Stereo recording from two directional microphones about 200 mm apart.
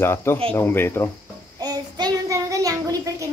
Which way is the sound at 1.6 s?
20° right (ahead or behind).